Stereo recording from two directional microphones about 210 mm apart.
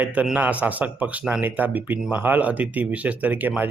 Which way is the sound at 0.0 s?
5° right (ahead or behind).